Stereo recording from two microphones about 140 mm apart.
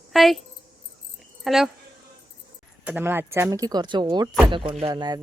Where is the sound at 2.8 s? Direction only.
15° right (ahead or behind).